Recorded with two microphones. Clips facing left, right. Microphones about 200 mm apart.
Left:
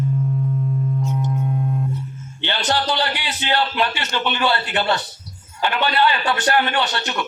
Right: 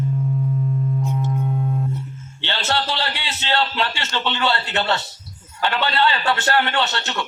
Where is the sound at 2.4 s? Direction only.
15° left (ahead or behind).